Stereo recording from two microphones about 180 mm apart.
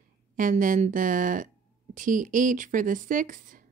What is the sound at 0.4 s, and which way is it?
Speech, 45° right (ahead or behind).